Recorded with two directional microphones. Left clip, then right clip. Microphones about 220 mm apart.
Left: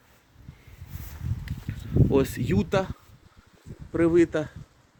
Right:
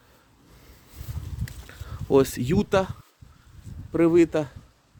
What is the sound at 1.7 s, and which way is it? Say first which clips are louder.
Speech: right 2 dB; 20° right (ahead or behind).